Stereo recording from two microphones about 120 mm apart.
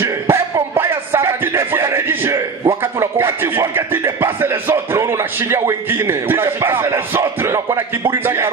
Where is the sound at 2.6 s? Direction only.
20° right (ahead or behind).